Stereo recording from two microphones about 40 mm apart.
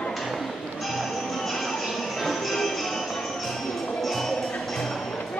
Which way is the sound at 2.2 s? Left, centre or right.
Centre.